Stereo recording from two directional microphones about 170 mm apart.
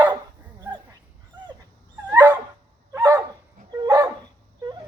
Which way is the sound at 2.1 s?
10° right (ahead or behind).